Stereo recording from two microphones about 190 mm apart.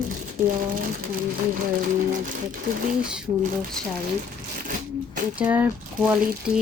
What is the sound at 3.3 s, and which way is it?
Speech, 40° right (ahead or behind).